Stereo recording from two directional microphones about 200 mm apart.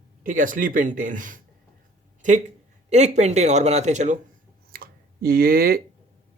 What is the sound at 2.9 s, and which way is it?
Speech, 35° right (ahead or behind).